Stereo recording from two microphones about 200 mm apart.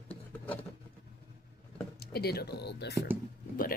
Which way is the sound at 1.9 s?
50° left (ahead or behind).